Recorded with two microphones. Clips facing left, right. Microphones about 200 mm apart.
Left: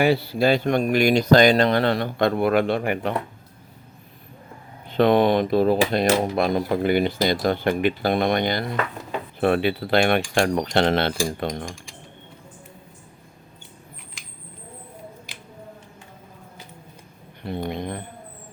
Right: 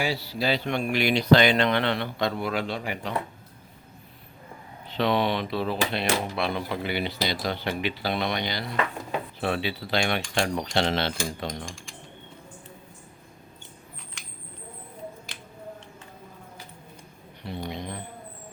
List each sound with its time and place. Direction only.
0.0 s speech: 55° left (ahead or behind)
4.9 s speech: 50° left (ahead or behind)
9.4 s cutlery: 55° left (ahead or behind)
11.3 s speech: 55° left (ahead or behind)
17.4 s a sound: 55° left (ahead or behind)